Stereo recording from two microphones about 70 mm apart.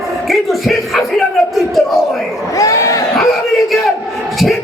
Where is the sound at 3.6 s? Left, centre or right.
Centre.